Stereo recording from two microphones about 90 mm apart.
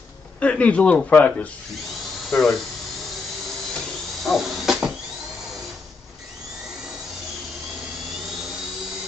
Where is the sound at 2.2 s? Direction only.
Centre (ahead or behind).